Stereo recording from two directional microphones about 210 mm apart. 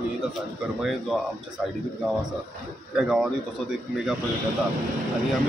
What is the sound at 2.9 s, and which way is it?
Speech, 5° right (ahead or behind).